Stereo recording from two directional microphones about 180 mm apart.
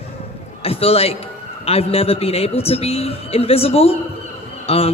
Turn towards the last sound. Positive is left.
turn(degrees=35)  # may be behind; listen again after turning